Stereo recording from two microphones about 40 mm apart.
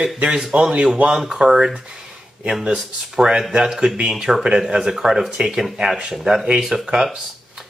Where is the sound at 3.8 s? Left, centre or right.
Right.